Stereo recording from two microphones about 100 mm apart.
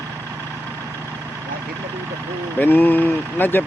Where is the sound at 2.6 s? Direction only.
20° left (ahead or behind).